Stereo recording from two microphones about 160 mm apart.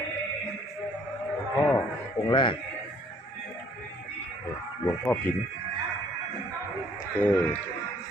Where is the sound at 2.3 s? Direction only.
30° left (ahead or behind).